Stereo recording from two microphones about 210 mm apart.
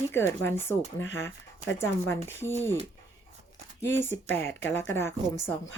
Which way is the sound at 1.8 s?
10° left (ahead or behind).